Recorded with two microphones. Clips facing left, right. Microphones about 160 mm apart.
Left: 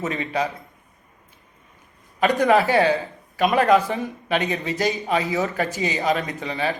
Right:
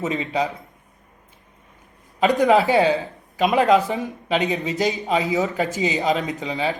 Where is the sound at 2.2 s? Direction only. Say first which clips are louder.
Right 1 dB; 20° right (ahead or behind).